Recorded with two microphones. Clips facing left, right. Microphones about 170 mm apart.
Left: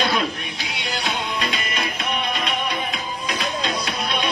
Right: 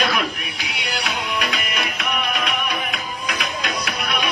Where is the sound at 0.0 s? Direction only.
25° left (ahead or behind).